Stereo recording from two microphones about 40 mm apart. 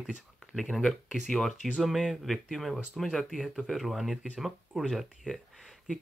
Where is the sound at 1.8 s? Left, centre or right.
Centre.